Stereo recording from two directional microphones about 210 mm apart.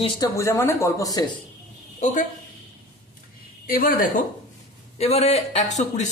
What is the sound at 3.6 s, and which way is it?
Speech, 45° left (ahead or behind).